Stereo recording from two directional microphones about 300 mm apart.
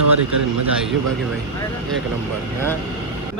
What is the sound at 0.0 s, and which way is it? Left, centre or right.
Speech, right.